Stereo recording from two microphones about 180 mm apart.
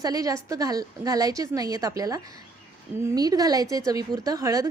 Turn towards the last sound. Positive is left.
turn(degrees=-20)  # may be behind; listen again after turning